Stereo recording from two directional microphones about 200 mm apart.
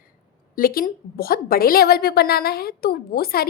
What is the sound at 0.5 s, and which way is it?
A woman's voice, 45° left (ahead or behind).